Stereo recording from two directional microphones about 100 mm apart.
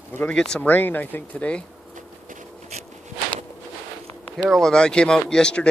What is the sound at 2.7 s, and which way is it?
Walk, 90° right.